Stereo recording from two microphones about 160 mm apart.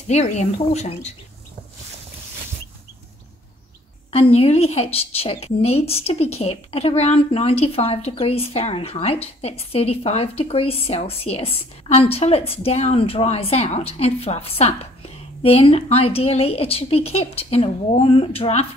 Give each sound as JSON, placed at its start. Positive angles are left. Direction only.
{"t": 0.1, "sound": "speech", "side_deg": 45}
{"t": 4.1, "sound": "speech", "side_deg": 40}